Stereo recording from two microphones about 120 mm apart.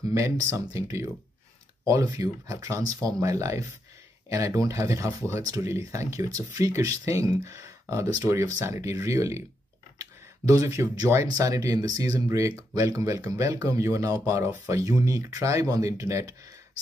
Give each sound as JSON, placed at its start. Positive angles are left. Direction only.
{"t": 0.1, "sound": "speech", "side_deg": -25}
{"t": 10.5, "sound": "speech", "side_deg": -30}